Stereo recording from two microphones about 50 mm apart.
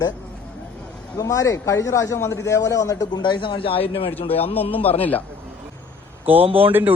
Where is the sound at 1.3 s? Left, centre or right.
Left.